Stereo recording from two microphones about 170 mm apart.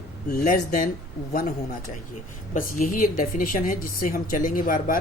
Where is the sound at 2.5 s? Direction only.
50° left (ahead or behind).